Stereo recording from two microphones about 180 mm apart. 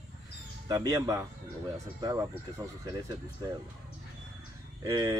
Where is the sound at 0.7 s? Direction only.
20° right (ahead or behind).